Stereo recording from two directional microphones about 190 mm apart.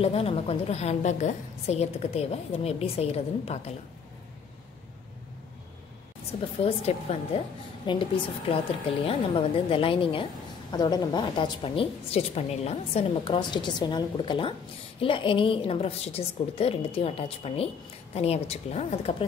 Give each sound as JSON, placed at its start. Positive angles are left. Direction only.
{"t": 0.0, "sound": "a woman's voice", "side_deg": 30}
{"t": 6.6, "sound": "a woman's voice", "side_deg": 30}